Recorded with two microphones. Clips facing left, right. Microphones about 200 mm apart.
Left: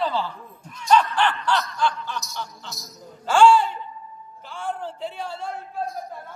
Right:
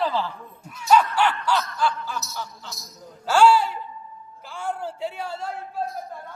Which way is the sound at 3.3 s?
5° right (ahead or behind).